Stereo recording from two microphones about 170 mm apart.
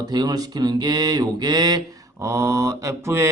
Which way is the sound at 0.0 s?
25° right (ahead or behind).